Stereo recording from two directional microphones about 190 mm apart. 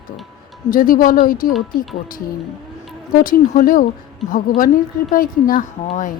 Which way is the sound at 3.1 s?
45° left (ahead or behind).